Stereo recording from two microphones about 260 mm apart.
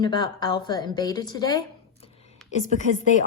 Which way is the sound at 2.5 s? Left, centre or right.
Left.